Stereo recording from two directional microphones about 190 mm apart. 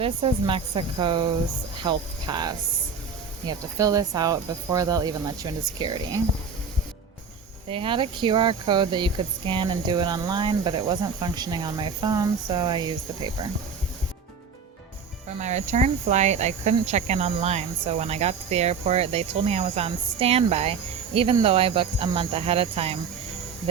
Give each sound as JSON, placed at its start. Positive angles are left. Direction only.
{"t": 0.0, "sound": "speech", "side_deg": -25}
{"t": 7.7, "sound": "speech", "side_deg": -25}
{"t": 15.4, "sound": "speech", "side_deg": -35}